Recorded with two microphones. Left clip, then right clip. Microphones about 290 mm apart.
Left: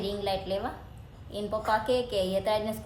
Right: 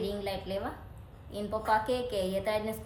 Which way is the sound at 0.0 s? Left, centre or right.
Centre.